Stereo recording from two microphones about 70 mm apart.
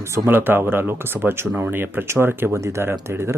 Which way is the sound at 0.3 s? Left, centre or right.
Right.